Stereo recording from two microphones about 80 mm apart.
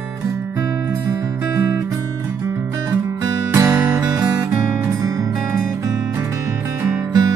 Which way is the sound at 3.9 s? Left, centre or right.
Right.